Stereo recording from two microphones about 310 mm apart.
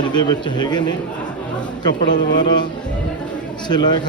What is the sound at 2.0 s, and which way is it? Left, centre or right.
Speech, left.